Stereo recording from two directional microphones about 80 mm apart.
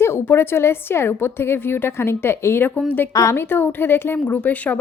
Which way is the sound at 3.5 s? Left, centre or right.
Left.